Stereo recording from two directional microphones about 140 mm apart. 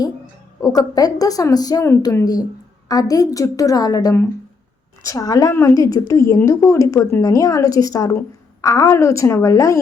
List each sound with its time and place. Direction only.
0.6 s a woman's voice: 25° left (ahead or behind)